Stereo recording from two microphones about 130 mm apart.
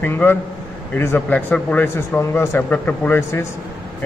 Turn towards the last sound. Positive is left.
turn(degrees=15)  # may be behind; listen again after turning